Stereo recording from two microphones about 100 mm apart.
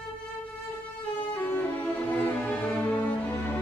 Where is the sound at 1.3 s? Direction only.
15° left (ahead or behind).